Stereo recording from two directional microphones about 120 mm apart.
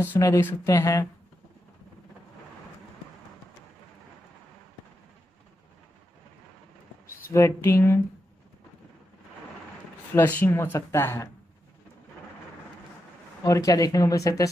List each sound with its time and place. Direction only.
0.2 s speech: 20° left (ahead or behind)
7.3 s speech: 25° left (ahead or behind)
10.1 s speech: 15° left (ahead or behind)
13.4 s speech: 30° left (ahead or behind)